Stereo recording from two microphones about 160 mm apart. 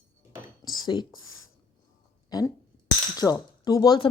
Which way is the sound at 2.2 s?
20° left (ahead or behind).